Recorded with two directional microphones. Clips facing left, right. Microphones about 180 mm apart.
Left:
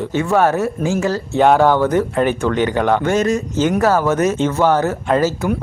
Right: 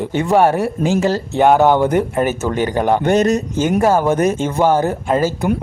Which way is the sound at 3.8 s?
15° right (ahead or behind).